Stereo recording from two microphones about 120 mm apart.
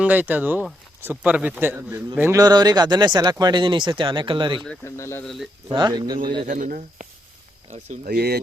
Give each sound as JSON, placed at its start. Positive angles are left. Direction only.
{"t": 0.0, "sound": "a man's voice", "side_deg": -15}
{"t": 2.4, "sound": "speech", "side_deg": -35}
{"t": 4.9, "sound": "speech", "side_deg": 25}
{"t": 5.2, "sound": "speech", "side_deg": 0}
{"t": 5.7, "sound": "speech", "side_deg": -35}
{"t": 6.4, "sound": "speech", "side_deg": -90}
{"t": 7.7, "sound": "speech", "side_deg": -70}